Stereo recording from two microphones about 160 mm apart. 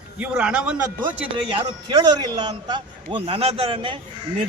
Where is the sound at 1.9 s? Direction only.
30° right (ahead or behind).